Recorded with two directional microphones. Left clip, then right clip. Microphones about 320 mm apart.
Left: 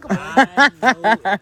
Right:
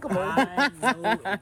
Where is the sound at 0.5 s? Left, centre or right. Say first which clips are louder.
Left 10 dB; left.